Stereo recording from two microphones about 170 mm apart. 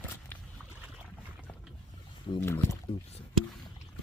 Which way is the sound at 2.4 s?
15° left (ahead or behind).